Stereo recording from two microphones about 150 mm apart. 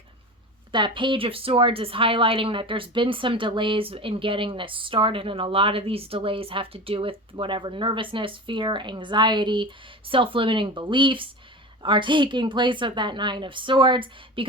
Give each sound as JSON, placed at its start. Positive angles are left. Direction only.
{"t": 0.7, "sound": "a woman's voice", "side_deg": -30}